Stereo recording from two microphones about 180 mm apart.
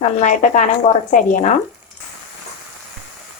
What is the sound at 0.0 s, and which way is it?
A woman's voice, 40° left (ahead or behind).